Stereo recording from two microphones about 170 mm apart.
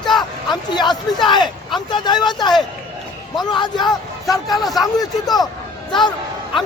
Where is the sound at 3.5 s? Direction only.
25° left (ahead or behind).